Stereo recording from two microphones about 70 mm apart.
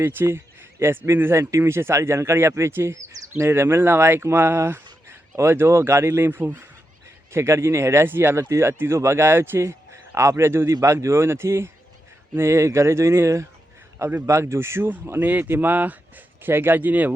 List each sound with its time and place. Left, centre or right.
0.0 s speech: right